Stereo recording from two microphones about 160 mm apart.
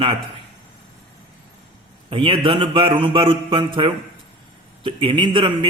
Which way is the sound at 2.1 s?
30° right (ahead or behind).